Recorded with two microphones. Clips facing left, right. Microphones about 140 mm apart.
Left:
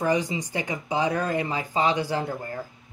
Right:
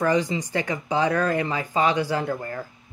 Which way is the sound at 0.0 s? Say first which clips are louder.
Right 2 dB; 15° left (ahead or behind).